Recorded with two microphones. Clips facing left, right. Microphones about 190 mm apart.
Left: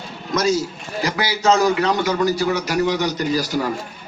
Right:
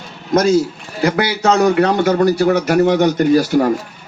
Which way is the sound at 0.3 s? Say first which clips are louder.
Right 6 dB; 55° right (ahead or behind).